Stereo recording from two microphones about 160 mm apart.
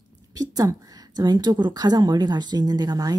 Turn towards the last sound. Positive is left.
turn(degrees=-25)  # may be behind; listen again after turning